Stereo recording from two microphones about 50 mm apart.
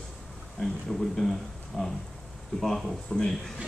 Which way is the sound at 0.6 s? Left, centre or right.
Centre.